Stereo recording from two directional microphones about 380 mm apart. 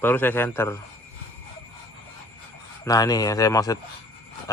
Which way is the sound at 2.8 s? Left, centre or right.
Centre.